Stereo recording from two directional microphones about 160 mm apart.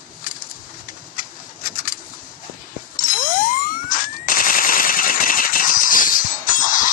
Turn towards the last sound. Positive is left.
turn(degrees=55)  # may be behind; listen again after turning